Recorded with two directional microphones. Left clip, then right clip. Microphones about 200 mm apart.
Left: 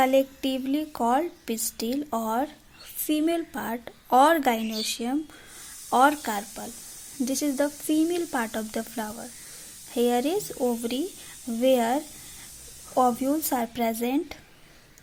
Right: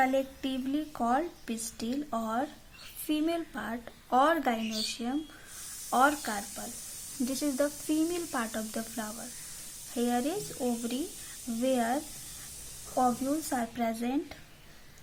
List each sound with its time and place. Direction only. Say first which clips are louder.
0.0 s a woman's voice: left 6 dB; 30° left (ahead or behind)
13.0 s a woman's voice: left 6 dB; 30° left (ahead or behind)